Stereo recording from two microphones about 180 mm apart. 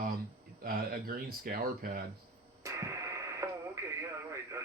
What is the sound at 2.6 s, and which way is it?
Radio, 15° right (ahead or behind).